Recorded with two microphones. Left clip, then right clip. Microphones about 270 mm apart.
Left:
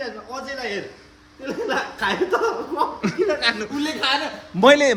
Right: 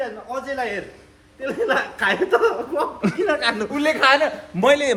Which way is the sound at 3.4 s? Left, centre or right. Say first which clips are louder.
Even; right.